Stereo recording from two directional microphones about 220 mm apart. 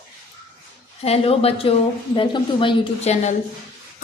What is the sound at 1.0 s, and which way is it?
A woman's voice, 25° left (ahead or behind).